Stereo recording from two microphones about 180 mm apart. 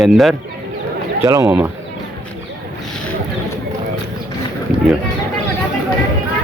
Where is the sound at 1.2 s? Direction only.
15° right (ahead or behind).